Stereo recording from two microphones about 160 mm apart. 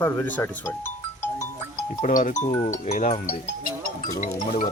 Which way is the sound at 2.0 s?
55° left (ahead or behind).